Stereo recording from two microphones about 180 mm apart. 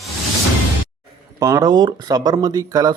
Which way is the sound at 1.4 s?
20° right (ahead or behind).